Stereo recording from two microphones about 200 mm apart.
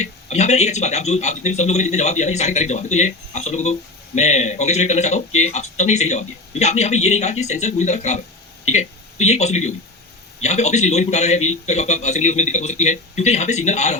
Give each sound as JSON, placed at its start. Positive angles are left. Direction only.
{"t": 0.0, "sound": "speech", "side_deg": 35}